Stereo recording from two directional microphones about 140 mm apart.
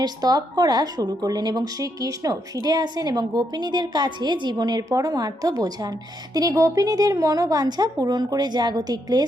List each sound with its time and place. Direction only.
0.0 s speech: 30° right (ahead or behind)